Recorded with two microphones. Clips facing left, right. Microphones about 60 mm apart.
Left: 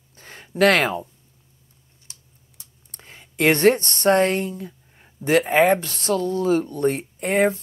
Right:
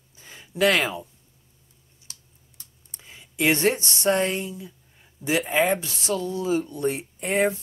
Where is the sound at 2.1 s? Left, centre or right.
Left.